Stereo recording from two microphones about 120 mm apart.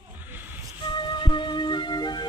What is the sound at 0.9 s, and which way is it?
Music, 40° left (ahead or behind).